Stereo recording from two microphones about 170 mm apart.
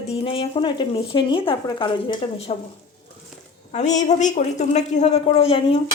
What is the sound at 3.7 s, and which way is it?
A woman's voice, 45° left (ahead or behind).